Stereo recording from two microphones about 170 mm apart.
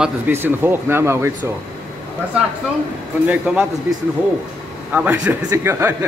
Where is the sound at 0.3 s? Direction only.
10° right (ahead or behind).